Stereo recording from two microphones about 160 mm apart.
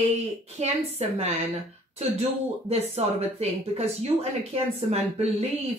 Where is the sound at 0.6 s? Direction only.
40° right (ahead or behind).